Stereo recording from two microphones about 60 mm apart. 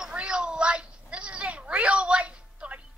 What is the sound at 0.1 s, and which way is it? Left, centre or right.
Cat, centre.